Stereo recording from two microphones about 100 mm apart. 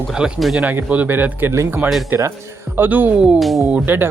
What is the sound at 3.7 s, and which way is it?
Speech, 20° right (ahead or behind).